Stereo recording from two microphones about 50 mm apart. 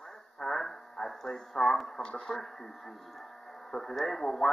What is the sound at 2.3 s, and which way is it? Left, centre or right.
Speech, centre.